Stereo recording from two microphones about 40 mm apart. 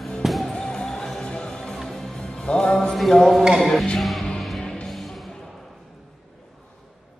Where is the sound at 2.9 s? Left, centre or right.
Centre.